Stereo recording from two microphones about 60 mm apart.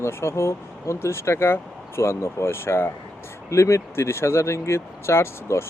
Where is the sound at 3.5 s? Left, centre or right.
Left.